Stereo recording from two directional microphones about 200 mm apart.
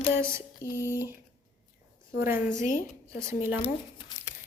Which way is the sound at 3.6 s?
20° left (ahead or behind).